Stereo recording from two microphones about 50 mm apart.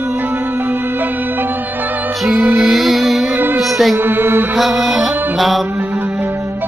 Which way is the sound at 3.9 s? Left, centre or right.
Right.